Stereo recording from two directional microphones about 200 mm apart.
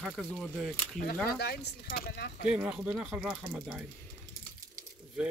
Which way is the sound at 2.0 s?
55° left (ahead or behind).